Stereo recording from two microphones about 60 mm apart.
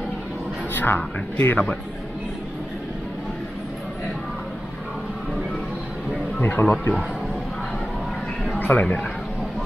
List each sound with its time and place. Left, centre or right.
0.7 s speech: left
6.4 s speech: left
8.5 s a sound: left